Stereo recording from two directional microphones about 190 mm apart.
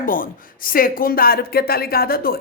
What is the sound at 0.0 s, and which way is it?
Speech, 45° left (ahead or behind).